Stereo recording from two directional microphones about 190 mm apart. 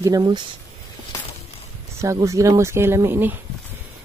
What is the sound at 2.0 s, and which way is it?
Speech, 15° right (ahead or behind).